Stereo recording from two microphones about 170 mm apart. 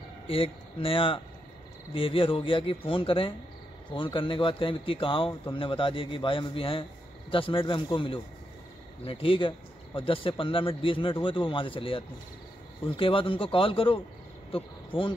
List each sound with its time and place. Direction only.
0.3 s a man's voice: 35° left (ahead or behind)